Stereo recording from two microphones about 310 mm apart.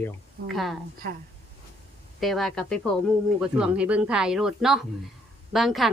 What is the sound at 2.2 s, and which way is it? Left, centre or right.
A woman's voice, centre.